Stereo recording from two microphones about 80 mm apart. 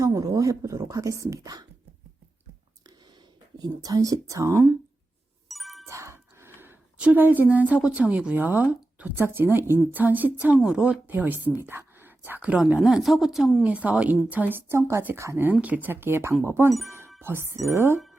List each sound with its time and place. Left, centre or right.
0.0 s a woman's voice: right
3.6 s a woman's voice: right
5.5 s music: centre
5.9 s a sound: right
7.0 s a woman's voice: right
8.7 s a sound: centre
9.1 s a woman's voice: right
12.8 s a woman's voice: centre
13.7 s a woman's voice: centre
14.7 s speech: right
15.6 s a woman's voice: right
16.8 s music: right
17.2 s speech: right